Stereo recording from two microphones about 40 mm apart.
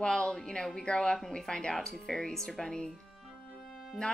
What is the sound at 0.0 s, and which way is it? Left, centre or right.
A woman's voice, centre.